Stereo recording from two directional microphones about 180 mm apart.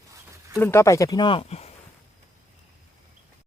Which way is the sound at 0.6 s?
15° left (ahead or behind).